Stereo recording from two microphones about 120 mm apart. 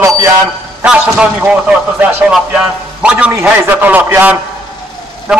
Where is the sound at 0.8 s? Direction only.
5° right (ahead or behind).